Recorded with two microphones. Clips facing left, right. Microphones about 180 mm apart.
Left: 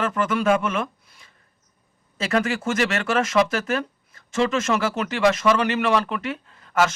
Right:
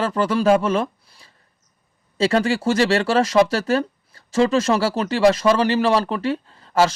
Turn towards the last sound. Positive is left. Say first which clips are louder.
# right 3 dB
turn(degrees=-30)  # may be behind; listen again after turning